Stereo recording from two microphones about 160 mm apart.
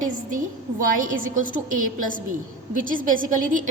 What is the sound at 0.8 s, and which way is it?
A woman's voice, 60° right (ahead or behind).